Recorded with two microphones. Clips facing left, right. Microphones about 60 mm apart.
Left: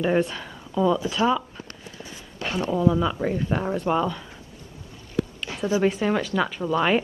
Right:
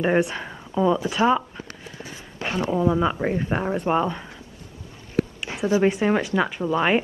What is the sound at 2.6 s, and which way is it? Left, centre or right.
Speech, right.